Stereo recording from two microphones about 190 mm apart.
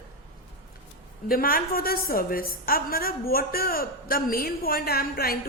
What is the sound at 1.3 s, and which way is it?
A woman's voice, 50° left (ahead or behind).